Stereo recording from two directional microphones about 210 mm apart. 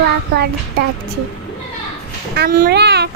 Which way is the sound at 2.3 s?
45° right (ahead or behind).